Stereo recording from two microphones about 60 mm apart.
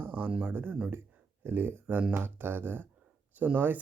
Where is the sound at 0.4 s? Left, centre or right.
Right.